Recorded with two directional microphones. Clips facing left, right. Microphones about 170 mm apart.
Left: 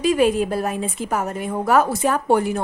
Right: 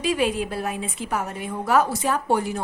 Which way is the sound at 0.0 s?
45° left (ahead or behind).